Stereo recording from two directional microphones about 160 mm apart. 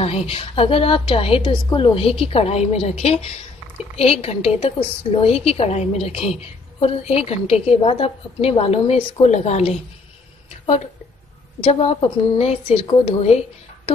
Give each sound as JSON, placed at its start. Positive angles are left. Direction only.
{"t": 0.0, "sound": "a woman's voice", "side_deg": 40}
{"t": 11.6, "sound": "a woman's voice", "side_deg": 40}